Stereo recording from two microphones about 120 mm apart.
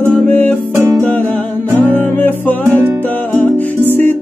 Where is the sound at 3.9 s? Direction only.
15° left (ahead or behind).